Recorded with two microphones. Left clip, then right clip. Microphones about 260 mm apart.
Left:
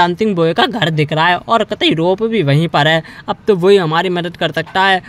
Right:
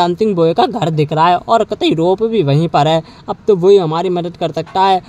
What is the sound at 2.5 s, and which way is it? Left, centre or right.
Speech, centre.